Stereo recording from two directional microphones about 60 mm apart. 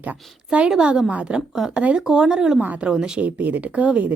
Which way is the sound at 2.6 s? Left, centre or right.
Right.